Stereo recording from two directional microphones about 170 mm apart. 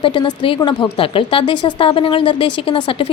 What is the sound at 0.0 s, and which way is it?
Speech, 30° left (ahead or behind).